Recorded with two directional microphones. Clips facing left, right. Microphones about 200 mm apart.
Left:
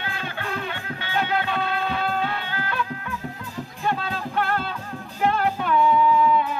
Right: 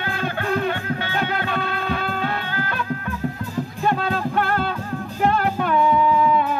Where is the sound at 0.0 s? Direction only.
45° right (ahead or behind).